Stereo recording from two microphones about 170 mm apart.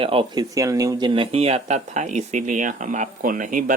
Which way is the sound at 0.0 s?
30° right (ahead or behind).